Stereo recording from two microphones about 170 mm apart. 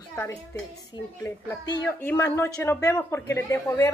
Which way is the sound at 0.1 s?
10° left (ahead or behind).